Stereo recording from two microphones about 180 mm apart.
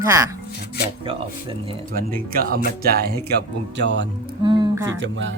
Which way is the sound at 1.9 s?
55° right (ahead or behind).